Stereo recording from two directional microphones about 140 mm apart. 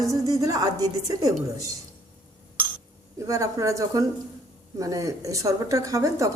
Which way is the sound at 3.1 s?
20° right (ahead or behind).